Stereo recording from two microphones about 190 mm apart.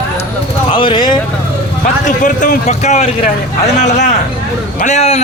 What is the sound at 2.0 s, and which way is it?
A man's voice, 45° left (ahead or behind).